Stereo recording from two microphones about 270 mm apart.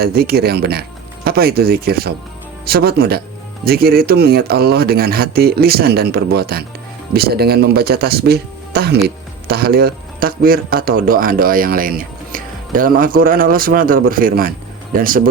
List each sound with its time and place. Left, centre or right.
0.0 s speech: right